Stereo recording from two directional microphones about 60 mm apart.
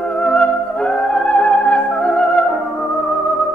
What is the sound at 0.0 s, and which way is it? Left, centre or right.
Music, centre.